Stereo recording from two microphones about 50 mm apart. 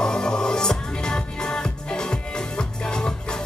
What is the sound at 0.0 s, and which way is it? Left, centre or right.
Music, centre.